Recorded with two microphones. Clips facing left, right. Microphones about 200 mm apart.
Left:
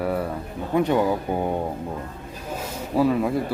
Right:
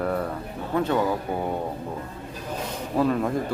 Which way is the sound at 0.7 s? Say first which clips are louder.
Left 3 dB; 15° left (ahead or behind).